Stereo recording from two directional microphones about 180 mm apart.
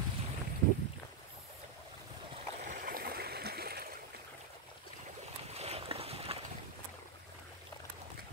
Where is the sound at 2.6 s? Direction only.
50° right (ahead or behind).